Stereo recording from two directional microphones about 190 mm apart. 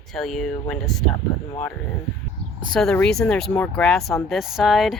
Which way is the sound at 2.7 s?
5° left (ahead or behind).